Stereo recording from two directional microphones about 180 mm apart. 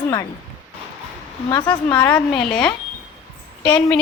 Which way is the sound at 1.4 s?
25° left (ahead or behind).